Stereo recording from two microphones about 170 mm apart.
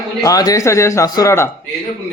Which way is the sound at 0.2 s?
20° left (ahead or behind).